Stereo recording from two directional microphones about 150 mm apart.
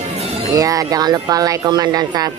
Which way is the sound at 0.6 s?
25° right (ahead or behind).